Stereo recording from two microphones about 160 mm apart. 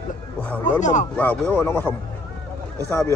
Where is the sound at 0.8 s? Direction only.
50° left (ahead or behind).